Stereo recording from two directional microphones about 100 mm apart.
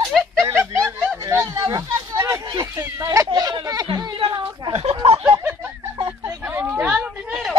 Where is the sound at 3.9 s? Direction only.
50° right (ahead or behind).